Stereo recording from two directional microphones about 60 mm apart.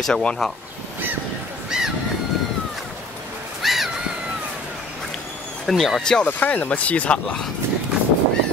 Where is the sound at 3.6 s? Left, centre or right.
Centre.